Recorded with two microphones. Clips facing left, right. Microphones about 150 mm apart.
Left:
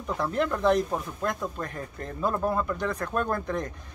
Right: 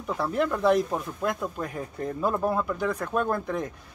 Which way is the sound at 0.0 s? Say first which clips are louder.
Right 1 dB; 5° right (ahead or behind).